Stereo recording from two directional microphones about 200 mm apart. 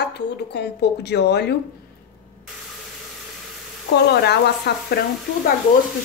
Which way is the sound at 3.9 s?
55° left (ahead or behind).